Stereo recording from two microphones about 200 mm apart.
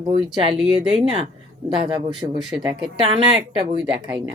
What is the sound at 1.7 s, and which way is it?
Speech, 25° right (ahead or behind).